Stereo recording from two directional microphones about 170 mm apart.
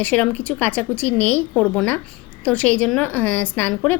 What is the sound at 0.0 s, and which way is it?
A woman's voice, 10° left (ahead or behind).